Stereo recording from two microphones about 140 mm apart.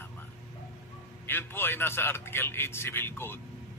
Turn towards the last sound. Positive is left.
turn(degrees=15)  # may be behind; listen again after turning